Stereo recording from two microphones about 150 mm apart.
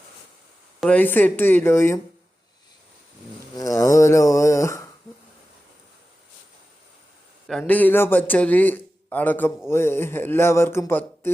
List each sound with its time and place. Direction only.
0.8 s a man's voice: 10° left (ahead or behind)
3.5 s speech: 20° left (ahead or behind)
7.4 s a man's voice: centre (ahead or behind)